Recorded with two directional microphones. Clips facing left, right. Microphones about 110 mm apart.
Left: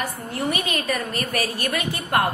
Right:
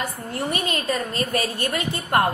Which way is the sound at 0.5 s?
30° right (ahead or behind).